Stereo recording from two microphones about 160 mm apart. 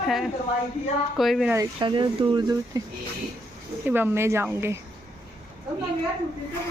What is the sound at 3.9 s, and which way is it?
Speech, 15° right (ahead or behind).